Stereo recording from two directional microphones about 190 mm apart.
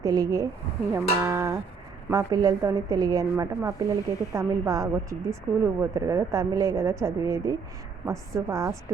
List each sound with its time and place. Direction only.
0.0 s a woman's voice: 20° right (ahead or behind)